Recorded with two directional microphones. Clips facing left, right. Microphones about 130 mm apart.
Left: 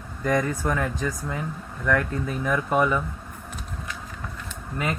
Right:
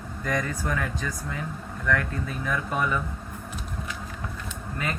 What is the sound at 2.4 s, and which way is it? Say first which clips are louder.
Speech: left 6 dB; 30° left (ahead or behind).